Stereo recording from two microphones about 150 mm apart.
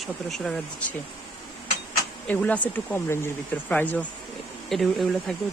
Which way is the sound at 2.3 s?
10° left (ahead or behind).